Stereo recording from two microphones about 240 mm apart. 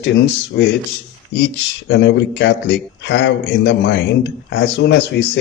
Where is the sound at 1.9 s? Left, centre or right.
Left.